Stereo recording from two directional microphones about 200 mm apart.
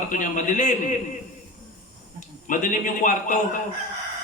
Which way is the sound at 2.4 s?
40° left (ahead or behind).